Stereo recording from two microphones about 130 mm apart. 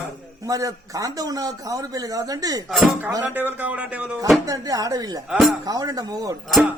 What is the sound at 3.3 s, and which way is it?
Speech, 15° right (ahead or behind).